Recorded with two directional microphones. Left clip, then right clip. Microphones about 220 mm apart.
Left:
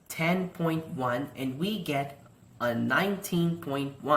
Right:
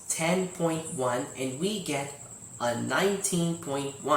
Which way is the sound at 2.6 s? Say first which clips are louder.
Even; 15° left (ahead or behind).